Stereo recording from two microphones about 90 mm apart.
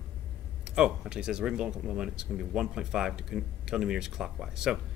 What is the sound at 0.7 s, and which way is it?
Speech, 10° right (ahead or behind).